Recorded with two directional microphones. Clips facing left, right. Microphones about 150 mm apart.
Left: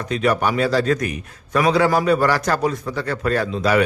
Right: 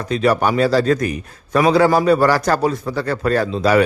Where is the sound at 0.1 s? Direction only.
35° right (ahead or behind).